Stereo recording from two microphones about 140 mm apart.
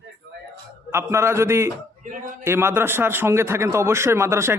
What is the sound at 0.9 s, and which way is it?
A man's voice, 20° right (ahead or behind).